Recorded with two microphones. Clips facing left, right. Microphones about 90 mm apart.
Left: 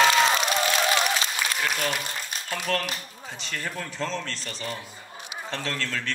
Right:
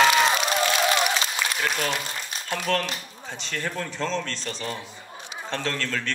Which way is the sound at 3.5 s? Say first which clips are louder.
Right 3 dB; 60° right (ahead or behind).